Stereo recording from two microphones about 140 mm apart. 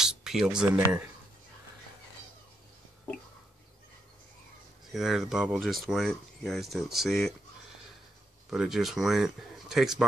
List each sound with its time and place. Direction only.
0.0 s speech: 5° right (ahead or behind)
4.9 s speech: centre (ahead or behind)
8.5 s speech: centre (ahead or behind)